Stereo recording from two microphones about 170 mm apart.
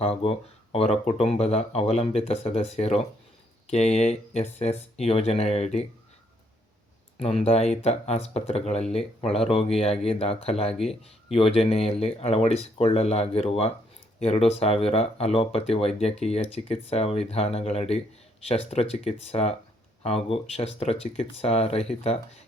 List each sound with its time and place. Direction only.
0.0 s speech: 35° left (ahead or behind)
7.2 s speech: 35° left (ahead or behind)